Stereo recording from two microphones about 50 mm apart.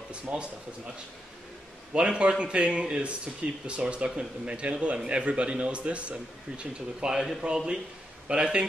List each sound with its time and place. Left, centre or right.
0.1 s a man's voice: right
2.0 s a man's voice: centre
7.1 s a man's voice: centre